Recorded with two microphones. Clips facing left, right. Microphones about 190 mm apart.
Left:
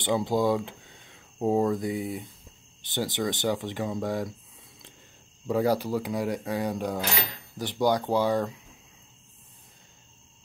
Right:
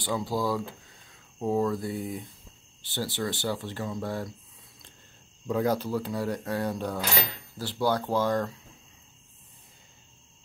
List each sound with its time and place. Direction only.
0.0 s speech: 20° left (ahead or behind)
5.5 s speech: 10° left (ahead or behind)